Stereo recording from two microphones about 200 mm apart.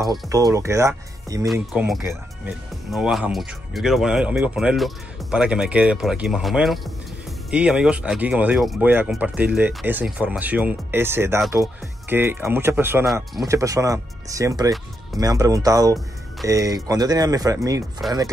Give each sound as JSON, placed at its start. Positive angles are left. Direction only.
{"t": 0.1, "sound": "speech", "side_deg": -20}
{"t": 1.4, "sound": "speech", "side_deg": 0}
{"t": 13.0, "sound": "speech", "side_deg": 0}
{"t": 13.5, "sound": "speech", "side_deg": -15}